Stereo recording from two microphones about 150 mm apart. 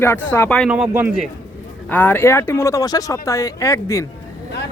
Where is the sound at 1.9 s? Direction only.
10° left (ahead or behind).